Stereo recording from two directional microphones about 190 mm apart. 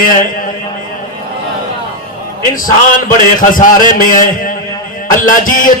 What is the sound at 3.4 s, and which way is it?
Speech, 45° left (ahead or behind).